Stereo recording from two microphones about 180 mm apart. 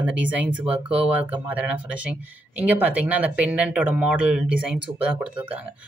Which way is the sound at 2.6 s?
10° right (ahead or behind).